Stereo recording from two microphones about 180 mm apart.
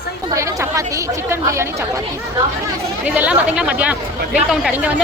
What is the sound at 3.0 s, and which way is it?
Speech, 10° right (ahead or behind).